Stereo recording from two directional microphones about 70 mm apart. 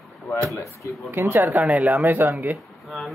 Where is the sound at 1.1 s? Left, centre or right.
Right.